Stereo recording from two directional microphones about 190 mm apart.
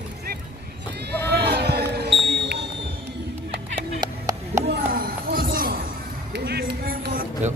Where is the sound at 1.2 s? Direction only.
60° right (ahead or behind).